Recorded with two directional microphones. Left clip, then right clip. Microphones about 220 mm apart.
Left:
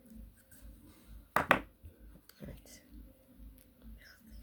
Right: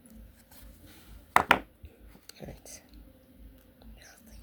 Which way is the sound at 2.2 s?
20° right (ahead or behind).